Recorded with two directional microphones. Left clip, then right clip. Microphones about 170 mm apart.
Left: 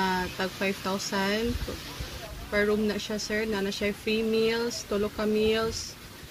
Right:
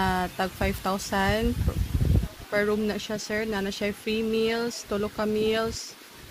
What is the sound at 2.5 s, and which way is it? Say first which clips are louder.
Speech: even; 65° right (ahead or behind).